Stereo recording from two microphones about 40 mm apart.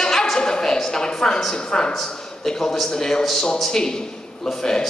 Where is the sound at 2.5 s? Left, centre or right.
Centre.